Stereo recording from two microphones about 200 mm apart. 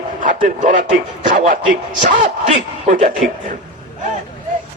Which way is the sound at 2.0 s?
40° right (ahead or behind).